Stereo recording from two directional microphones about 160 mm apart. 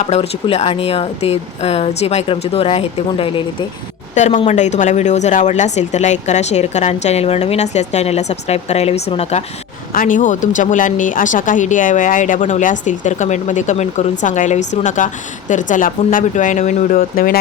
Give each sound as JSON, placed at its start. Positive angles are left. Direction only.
{"t": 0.1, "sound": "speech", "side_deg": 40}
{"t": 4.1, "sound": "a woman's voice", "side_deg": 50}
{"t": 9.9, "sound": "a woman's voice", "side_deg": 55}